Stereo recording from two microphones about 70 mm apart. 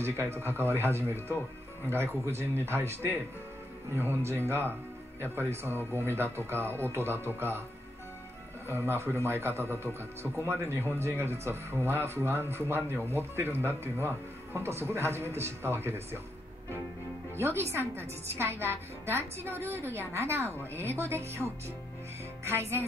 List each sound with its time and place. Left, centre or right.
0.0 s speech: right
8.6 s speech: right
17.4 s speech: right